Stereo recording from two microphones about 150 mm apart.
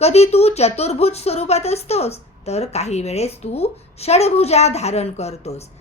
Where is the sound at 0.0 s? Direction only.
45° left (ahead or behind).